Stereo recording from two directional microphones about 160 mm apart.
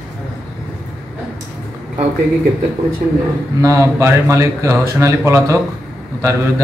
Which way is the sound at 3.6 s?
20° right (ahead or behind).